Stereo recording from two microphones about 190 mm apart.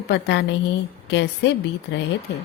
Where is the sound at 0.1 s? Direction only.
65° left (ahead or behind).